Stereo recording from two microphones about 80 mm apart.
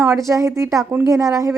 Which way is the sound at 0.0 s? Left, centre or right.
Right.